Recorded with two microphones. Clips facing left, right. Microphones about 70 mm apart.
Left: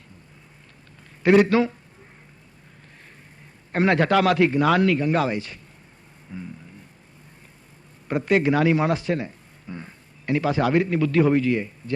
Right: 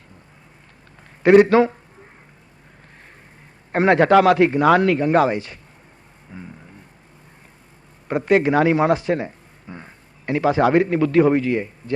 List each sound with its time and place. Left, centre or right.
1.2 s a man's voice: right
3.7 s a man's voice: right
6.3 s a sound: centre
8.0 s a man's voice: right